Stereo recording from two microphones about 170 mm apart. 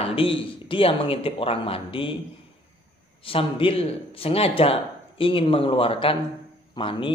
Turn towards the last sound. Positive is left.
turn(degrees=30)  # may be behind; listen again after turning